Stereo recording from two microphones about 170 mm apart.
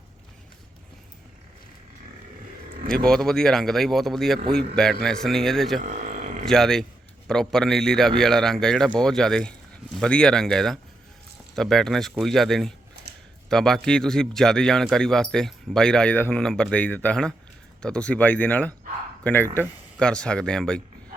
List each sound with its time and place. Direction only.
2.9 s speech: 5° left (ahead or behind)
5.9 s a sound: 45° right (ahead or behind)
6.4 s speech: centre (ahead or behind)